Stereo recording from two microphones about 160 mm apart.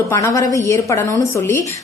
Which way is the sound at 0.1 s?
20° left (ahead or behind).